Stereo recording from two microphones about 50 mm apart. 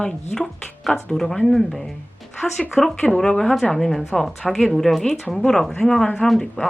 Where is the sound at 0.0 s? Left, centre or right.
Centre.